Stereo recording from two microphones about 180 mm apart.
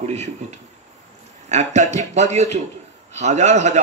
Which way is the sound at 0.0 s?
35° right (ahead or behind).